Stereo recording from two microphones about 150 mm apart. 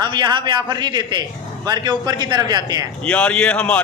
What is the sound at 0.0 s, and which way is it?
A man's voice, 30° right (ahead or behind).